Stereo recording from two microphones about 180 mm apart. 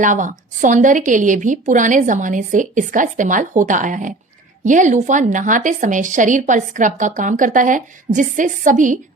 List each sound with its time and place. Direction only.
0.0 s a woman's voice: 45° right (ahead or behind)